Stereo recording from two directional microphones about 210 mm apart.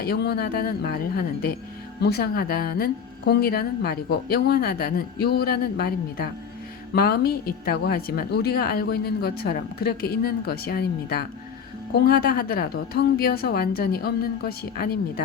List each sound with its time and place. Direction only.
0.0 s speech: 50° left (ahead or behind)